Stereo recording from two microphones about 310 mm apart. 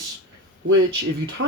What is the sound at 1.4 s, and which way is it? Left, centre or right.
Speech, right.